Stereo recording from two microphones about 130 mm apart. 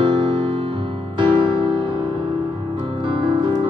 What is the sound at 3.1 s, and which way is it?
Music, 40° right (ahead or behind).